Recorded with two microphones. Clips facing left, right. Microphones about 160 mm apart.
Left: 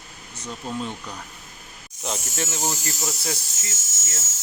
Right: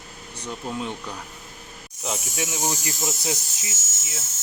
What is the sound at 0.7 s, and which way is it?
Speech, 10° right (ahead or behind).